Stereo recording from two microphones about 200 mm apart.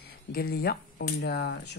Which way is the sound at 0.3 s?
50° left (ahead or behind).